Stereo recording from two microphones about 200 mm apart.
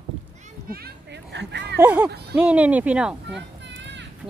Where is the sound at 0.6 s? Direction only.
55° right (ahead or behind).